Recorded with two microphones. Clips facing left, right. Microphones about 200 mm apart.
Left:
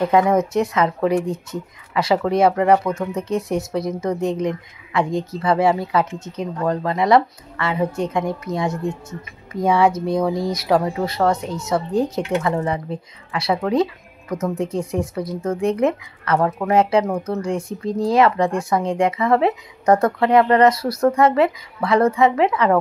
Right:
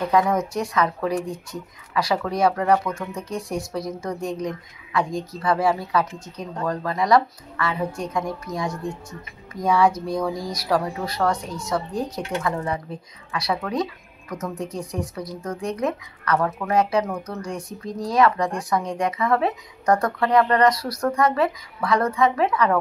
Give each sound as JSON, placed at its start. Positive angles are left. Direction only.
{"t": 0.1, "sound": "speech", "side_deg": 25}